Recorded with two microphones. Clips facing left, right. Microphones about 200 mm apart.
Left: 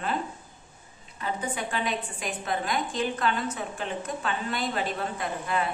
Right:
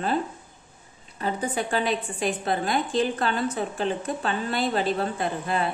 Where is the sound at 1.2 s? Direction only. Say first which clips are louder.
Right 4 dB; 35° right (ahead or behind).